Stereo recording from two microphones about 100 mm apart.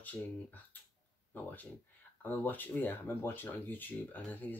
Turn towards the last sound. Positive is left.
turn(degrees=15)  # may be behind; listen again after turning